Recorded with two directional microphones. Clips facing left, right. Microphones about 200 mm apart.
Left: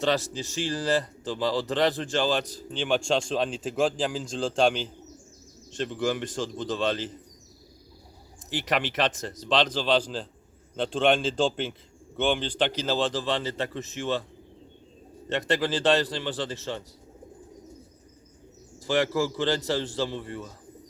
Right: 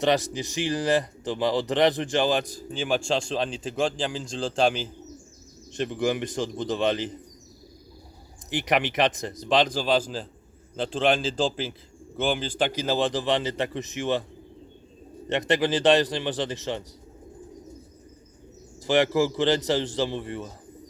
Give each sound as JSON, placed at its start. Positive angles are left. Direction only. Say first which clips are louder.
{"t": 0.0, "sound": "speech", "louder": "right 3 dB", "side_deg": -15}
{"t": 5.7, "sound": "speech", "louder": "right 2 dB", "side_deg": -15}
{"t": 8.4, "sound": "a man's voice", "louder": "right 3 dB", "side_deg": -15}
{"t": 15.3, "sound": "speech", "louder": "right 3 dB", "side_deg": -15}
{"t": 18.8, "sound": "a man's voice", "louder": "right 3 dB", "side_deg": -20}